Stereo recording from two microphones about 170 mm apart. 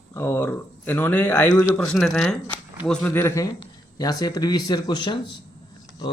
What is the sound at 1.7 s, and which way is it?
Speech, 5° left (ahead or behind).